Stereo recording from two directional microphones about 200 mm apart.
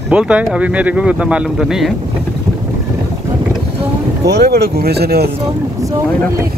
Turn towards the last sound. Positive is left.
turn(degrees=-50)  # may be behind; listen again after turning